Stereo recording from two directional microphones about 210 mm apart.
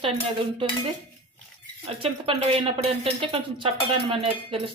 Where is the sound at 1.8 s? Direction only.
25° right (ahead or behind).